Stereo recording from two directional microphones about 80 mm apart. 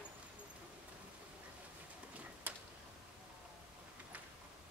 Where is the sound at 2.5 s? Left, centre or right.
Right.